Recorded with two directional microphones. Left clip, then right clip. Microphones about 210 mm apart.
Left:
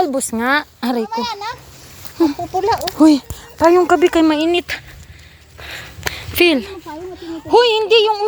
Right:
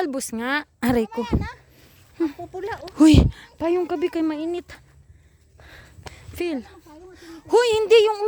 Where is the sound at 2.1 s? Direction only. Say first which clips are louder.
Left 10 dB; 25° right (ahead or behind).